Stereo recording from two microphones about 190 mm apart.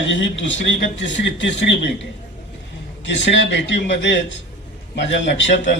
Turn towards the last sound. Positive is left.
turn(degrees=70)  # may be behind; listen again after turning